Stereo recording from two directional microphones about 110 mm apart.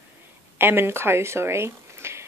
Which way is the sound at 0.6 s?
20° right (ahead or behind).